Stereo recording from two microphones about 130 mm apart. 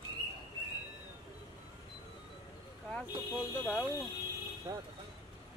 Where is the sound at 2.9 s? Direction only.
5° left (ahead or behind).